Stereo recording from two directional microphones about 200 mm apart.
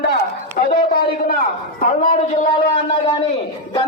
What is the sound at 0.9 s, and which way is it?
A man's voice, 45° left (ahead or behind).